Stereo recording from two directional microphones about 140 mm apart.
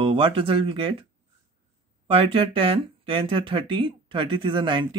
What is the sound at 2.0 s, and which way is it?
Speech, 40° right (ahead or behind).